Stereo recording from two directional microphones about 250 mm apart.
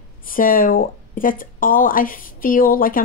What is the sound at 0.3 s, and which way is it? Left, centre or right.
A woman's voice, left.